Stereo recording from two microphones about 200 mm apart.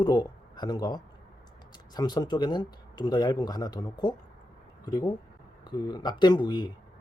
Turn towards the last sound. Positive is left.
turn(degrees=20)  # may be behind; listen again after turning